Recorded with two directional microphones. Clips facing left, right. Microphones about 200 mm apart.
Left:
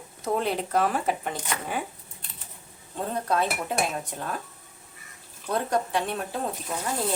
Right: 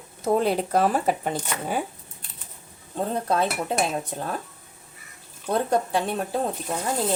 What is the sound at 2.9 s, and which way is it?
Speech, 30° right (ahead or behind).